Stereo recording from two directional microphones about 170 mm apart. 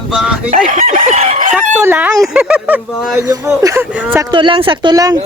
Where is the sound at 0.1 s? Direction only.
5° right (ahead or behind).